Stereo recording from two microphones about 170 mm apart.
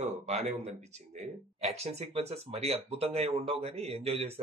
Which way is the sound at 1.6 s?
40° right (ahead or behind).